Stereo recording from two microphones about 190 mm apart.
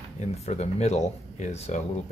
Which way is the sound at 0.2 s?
35° left (ahead or behind).